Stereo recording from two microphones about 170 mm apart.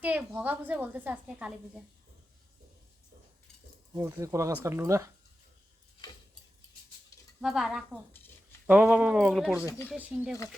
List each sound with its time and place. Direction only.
0.0 s a woman's voice: 10° right (ahead or behind)
3.9 s a woman's voice: 15° right (ahead or behind)
7.4 s a woman's voice: centre (ahead or behind)